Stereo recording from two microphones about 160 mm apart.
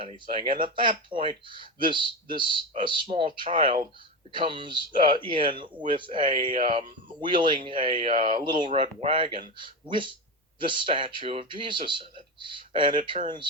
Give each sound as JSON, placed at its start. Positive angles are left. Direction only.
{"t": 0.0, "sound": "speech", "side_deg": -35}